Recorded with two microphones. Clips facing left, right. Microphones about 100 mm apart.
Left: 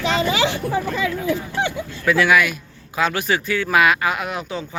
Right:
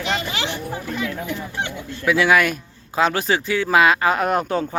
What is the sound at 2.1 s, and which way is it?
Speech, 10° right (ahead or behind).